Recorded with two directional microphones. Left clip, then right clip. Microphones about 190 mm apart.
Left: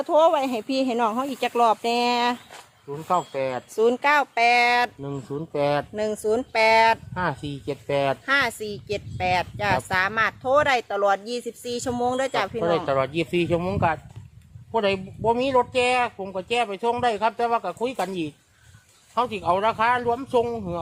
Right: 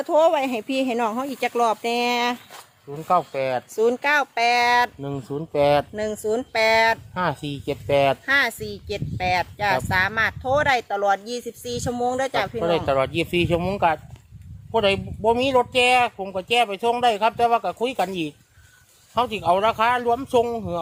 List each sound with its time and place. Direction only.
0.0 s speech: centre (ahead or behind)
3.1 s speech: 55° right (ahead or behind)
3.8 s a child's voice: 5° left (ahead or behind)
4.9 s speech: 40° right (ahead or behind)
6.0 s a child's voice: 10° left (ahead or behind)
7.1 s speech: 40° right (ahead or behind)
8.3 s a child's voice: 10° left (ahead or behind)
12.5 s speech: 45° right (ahead or behind)